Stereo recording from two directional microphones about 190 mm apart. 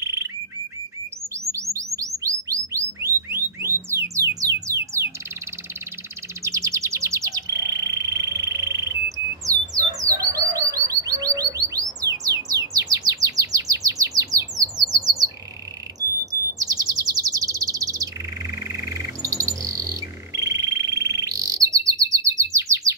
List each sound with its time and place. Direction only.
0.0 s bird: 15° right (ahead or behind)
1.5 s bird: 15° right (ahead or behind)
4.1 s music: 20° right (ahead or behind)
6.4 s bird: 15° right (ahead or behind)
16.0 s chirp: 20° right (ahead or behind)
20.3 s bird: 20° right (ahead or behind)